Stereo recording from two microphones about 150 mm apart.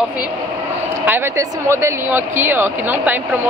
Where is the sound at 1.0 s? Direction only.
15° right (ahead or behind).